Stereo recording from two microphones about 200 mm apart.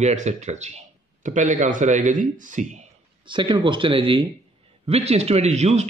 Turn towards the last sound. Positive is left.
turn(degrees=-35)  # may be behind; listen again after turning